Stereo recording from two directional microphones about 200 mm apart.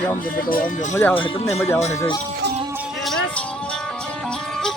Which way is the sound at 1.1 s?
25° left (ahead or behind).